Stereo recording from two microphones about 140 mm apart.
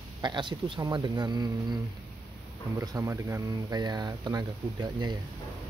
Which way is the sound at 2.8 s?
20° right (ahead or behind).